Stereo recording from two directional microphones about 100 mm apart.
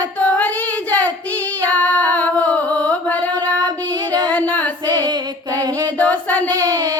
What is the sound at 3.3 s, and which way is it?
Child singing, 45° right (ahead or behind).